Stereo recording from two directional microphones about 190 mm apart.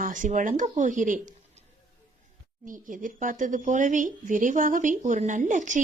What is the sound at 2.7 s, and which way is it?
Speech, 45° right (ahead or behind).